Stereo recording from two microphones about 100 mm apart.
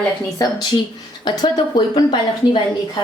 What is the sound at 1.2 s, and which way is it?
Speech, 45° left (ahead or behind).